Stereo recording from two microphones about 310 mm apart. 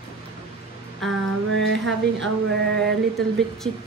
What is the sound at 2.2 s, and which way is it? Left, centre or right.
Speech, right.